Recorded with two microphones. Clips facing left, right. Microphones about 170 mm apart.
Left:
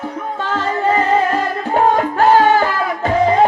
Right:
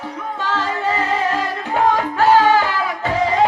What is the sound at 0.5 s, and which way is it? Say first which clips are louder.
Music: left 5 dB; 50° left (ahead or behind).